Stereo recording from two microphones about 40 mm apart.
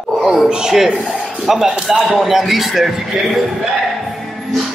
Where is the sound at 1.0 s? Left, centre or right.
Right.